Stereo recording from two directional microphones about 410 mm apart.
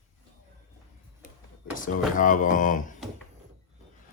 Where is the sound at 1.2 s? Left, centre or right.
Centre.